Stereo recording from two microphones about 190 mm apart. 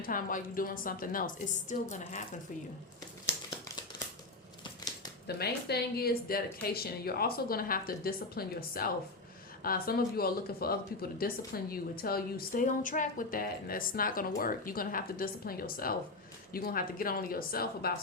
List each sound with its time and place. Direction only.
0.0 s speech: 45° left (ahead or behind)
4.6 s scissors: 20° left (ahead or behind)
5.4 s speech: 55° left (ahead or behind)